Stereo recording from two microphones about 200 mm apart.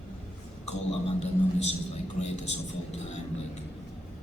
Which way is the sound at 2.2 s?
35° left (ahead or behind).